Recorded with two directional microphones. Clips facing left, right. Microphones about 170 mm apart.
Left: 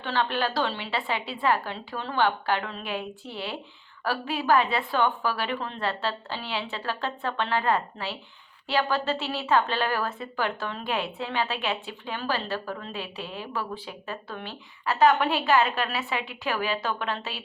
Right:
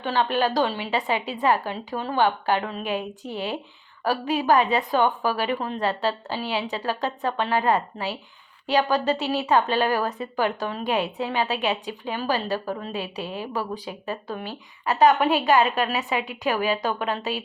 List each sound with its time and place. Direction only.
0.0 s a woman's voice: 15° right (ahead or behind)